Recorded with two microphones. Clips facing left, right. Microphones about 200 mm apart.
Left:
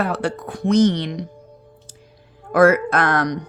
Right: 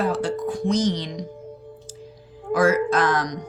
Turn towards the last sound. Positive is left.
turn(degrees=60)  # may be behind; listen again after turning